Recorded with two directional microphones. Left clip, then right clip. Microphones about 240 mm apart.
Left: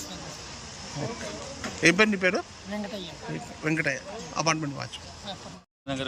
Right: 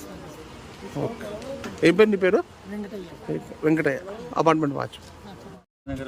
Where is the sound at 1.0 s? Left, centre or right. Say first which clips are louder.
Right 5 dB; centre.